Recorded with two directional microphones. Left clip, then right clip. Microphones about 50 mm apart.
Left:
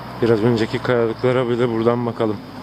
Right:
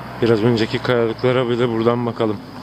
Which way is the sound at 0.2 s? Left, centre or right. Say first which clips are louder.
Right 1 dB; right.